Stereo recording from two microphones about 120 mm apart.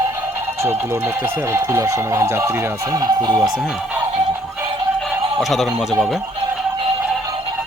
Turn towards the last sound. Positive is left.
turn(degrees=0)  # may be behind; listen again after turning